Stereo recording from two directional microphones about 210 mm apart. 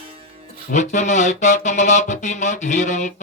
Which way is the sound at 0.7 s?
35° left (ahead or behind).